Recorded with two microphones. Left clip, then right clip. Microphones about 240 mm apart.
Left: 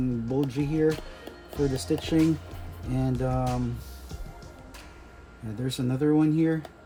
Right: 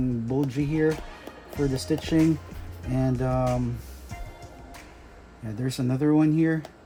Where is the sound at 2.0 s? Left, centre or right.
Right.